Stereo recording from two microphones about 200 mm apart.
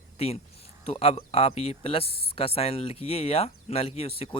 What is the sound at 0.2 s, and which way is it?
Speech, 30° left (ahead or behind).